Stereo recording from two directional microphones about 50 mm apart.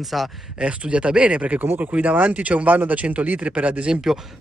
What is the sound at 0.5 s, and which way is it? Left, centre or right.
Speech, right.